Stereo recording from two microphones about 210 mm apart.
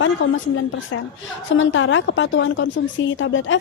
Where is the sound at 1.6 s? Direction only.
65° left (ahead or behind).